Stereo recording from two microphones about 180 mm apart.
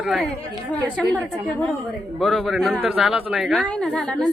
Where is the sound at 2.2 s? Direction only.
Centre (ahead or behind).